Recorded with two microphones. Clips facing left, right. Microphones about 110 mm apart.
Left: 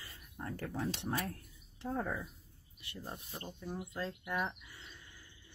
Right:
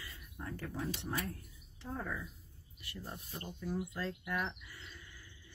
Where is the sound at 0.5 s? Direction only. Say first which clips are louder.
Left 2 dB; 60° left (ahead or behind).